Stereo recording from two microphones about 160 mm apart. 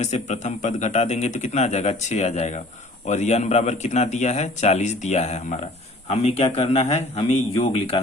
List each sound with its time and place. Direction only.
0.0 s a man's voice: 45° left (ahead or behind)